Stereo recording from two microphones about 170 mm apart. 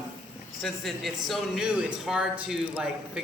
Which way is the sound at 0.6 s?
Centre (ahead or behind).